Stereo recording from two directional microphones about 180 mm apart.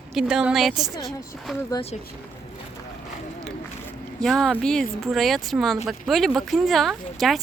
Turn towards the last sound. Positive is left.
turn(degrees=0)  # may be behind; listen again after turning